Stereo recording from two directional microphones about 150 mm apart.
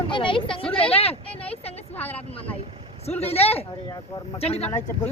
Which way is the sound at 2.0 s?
10° left (ahead or behind).